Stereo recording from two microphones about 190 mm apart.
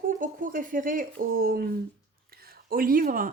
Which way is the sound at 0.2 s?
45° right (ahead or behind).